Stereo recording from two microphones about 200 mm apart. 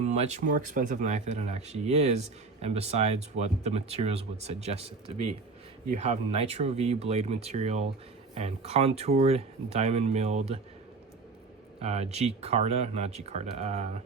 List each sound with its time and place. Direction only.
0.0 s speech: 35° right (ahead or behind)
11.8 s speech: 30° right (ahead or behind)